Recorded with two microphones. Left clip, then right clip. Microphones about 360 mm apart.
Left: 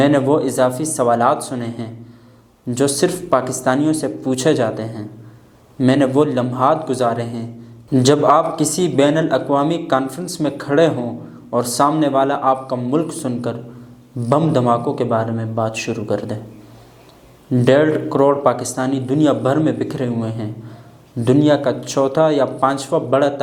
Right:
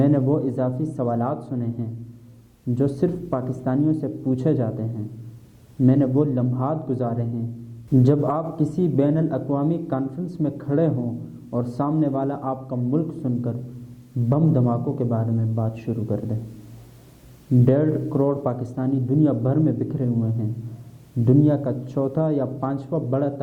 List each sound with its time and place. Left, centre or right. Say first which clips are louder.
0.0 s speech: left 7 dB; centre
17.7 s speech: left 9 dB; centre